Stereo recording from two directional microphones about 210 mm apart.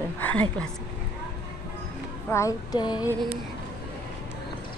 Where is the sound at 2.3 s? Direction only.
15° left (ahead or behind).